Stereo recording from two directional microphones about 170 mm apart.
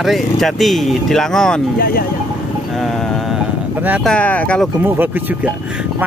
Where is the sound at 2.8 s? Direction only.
Centre (ahead or behind).